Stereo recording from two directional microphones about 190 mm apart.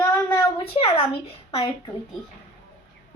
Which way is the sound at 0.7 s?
30° left (ahead or behind).